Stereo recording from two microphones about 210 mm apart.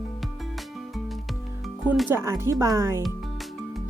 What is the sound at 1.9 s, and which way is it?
Speech, 10° right (ahead or behind).